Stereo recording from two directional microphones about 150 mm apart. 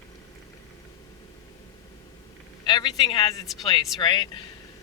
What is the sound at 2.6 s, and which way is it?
Speech, 30° left (ahead or behind).